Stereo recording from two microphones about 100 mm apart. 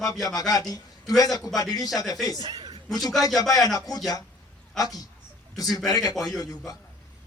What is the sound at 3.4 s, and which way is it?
Speech, 40° left (ahead or behind).